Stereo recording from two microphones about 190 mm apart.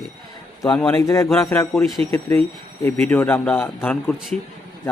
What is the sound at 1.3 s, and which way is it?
Speech, centre (ahead or behind).